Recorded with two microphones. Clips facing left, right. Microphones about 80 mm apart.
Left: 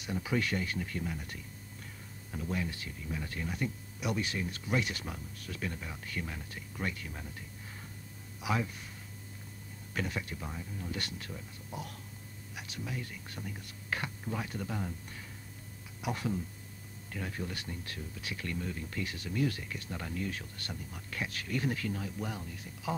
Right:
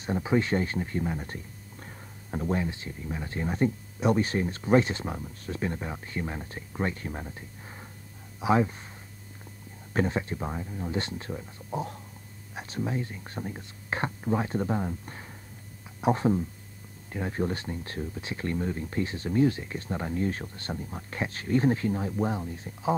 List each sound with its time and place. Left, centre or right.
0.0 s speech: right
9.9 s speech: right